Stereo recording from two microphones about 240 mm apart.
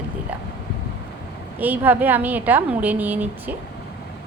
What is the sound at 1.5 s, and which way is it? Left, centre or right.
A woman's voice, centre.